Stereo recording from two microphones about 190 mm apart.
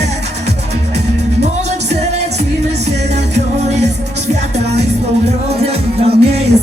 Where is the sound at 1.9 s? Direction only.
35° right (ahead or behind).